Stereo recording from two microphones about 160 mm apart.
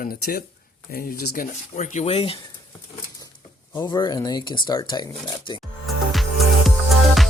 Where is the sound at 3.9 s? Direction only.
25° left (ahead or behind).